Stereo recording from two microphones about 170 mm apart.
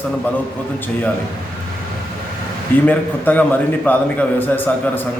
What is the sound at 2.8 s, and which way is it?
A man's voice, 10° left (ahead or behind).